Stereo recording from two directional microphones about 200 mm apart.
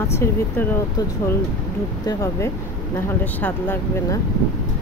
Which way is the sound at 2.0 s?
15° left (ahead or behind).